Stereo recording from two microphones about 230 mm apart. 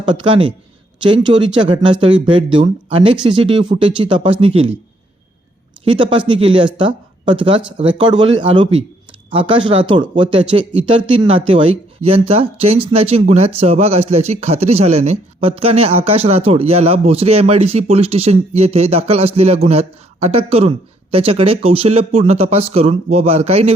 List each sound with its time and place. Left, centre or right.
0.0 s speech: right
5.8 s speech: right